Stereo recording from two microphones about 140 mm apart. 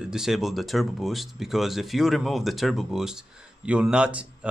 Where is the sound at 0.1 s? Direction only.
5° right (ahead or behind).